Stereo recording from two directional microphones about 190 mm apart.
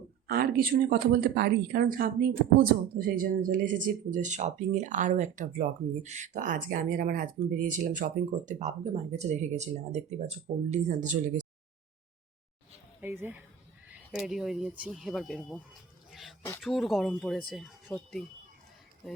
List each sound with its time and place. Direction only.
0.3 s speech: 50° right (ahead or behind)
13.0 s speech: 10° right (ahead or behind)